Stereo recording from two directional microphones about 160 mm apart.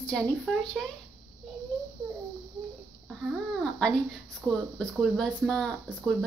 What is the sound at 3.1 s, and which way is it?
Babbling, centre (ahead or behind).